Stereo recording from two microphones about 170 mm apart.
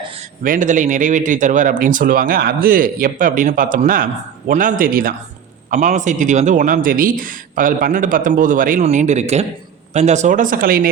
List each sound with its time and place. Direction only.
0.4 s speech: 50° right (ahead or behind)
5.7 s speech: 45° right (ahead or behind)